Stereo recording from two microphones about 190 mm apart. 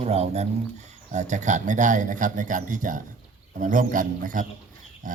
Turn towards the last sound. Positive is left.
turn(degrees=-45)  # may be behind; listen again after turning